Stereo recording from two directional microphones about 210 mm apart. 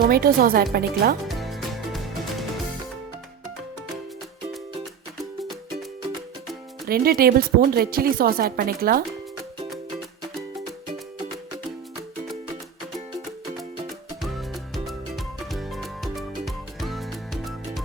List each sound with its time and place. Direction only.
0.1 s speech: 45° right (ahead or behind)
1.3 s music: centre (ahead or behind)
5.4 s music: centre (ahead or behind)
6.8 s speech: 45° right (ahead or behind)
14.2 s music: centre (ahead or behind)